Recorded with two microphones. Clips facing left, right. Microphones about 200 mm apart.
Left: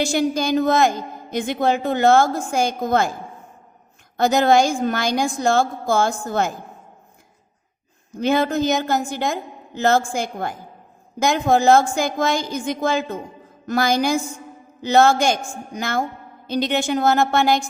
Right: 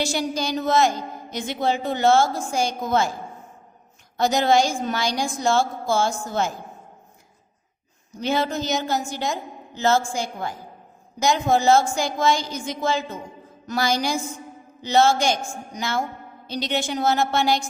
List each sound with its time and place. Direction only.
0.0 s a woman's voice: 50° left (ahead or behind)
4.2 s a woman's voice: 55° left (ahead or behind)
8.1 s a woman's voice: 55° left (ahead or behind)